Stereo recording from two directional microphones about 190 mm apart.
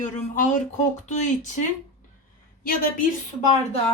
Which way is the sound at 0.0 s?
40° left (ahead or behind).